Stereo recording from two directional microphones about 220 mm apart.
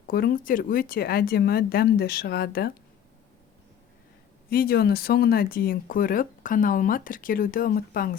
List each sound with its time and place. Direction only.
0.1 s a woman's voice: 40° left (ahead or behind)
4.4 s speech: 45° left (ahead or behind)